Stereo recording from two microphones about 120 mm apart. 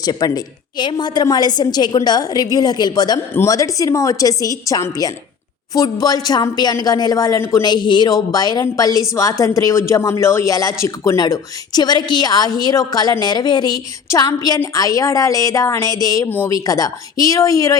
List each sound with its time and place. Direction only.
0.0 s a woman's voice: 30° left (ahead or behind)